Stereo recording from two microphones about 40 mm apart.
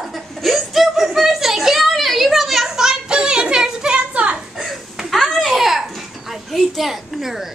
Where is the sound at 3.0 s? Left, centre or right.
Right.